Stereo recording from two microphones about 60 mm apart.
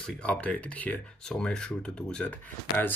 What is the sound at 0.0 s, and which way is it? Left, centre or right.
Speech, centre.